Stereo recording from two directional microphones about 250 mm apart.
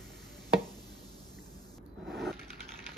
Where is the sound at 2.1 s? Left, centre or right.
Centre.